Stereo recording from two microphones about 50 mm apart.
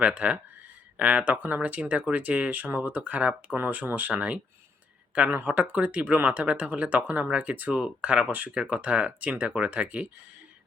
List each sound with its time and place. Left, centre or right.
0.0 s speech: right
5.4 s speech: right
7.8 s speech: right